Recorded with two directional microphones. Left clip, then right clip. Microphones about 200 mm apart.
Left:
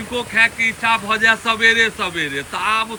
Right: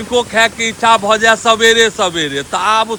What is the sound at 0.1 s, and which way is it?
Speech, 10° right (ahead or behind).